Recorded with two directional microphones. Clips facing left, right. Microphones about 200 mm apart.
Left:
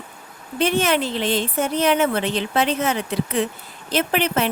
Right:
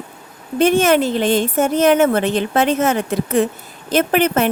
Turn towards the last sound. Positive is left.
turn(degrees=-50)  # may be behind; listen again after turning